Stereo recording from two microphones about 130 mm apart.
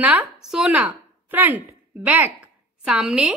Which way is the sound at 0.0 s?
10° right (ahead or behind).